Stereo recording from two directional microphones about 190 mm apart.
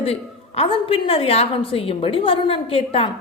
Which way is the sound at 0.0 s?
30° left (ahead or behind).